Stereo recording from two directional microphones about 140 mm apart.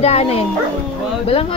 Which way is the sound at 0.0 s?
45° left (ahead or behind).